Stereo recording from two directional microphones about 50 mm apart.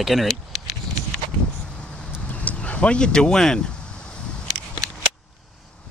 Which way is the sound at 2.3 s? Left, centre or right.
Left.